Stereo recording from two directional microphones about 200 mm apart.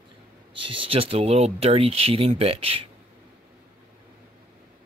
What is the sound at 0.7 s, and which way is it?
Speech, 25° right (ahead or behind).